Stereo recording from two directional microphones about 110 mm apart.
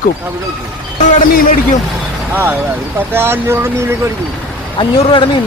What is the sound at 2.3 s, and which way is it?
Speech, 15° right (ahead or behind).